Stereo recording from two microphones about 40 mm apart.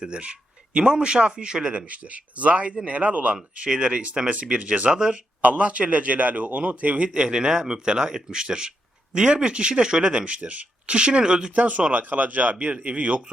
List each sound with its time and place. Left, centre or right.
0.0 s a man's voice: right
1.9 s a man's voice: right
3.5 s a man's voice: right
4.9 s a man's voice: right
5.4 s a man's voice: right
11.5 s a man's voice: right